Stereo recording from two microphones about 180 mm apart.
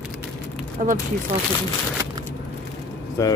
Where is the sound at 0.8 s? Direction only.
45° right (ahead or behind).